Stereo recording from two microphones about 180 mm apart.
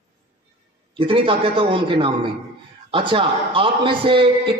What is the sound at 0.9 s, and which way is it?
A man's voice, 30° right (ahead or behind).